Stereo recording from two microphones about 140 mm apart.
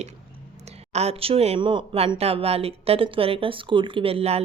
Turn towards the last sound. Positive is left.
turn(degrees=-45)  # may be behind; listen again after turning